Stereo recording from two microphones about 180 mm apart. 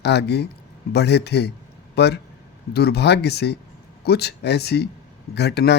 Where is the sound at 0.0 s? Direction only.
65° left (ahead or behind).